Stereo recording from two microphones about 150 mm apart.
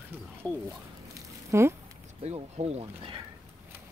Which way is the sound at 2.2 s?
45° right (ahead or behind).